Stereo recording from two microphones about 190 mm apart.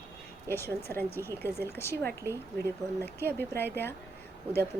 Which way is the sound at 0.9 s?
10° left (ahead or behind).